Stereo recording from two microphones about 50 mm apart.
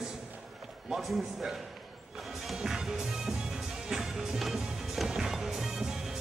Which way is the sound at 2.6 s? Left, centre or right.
Centre.